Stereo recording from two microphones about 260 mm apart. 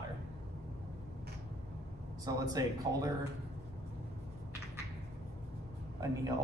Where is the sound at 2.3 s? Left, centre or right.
Centre.